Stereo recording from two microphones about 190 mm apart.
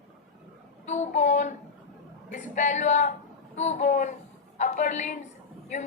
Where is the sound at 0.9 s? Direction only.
40° left (ahead or behind).